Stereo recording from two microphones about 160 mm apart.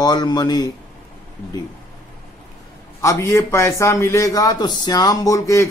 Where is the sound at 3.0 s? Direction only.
20° left (ahead or behind).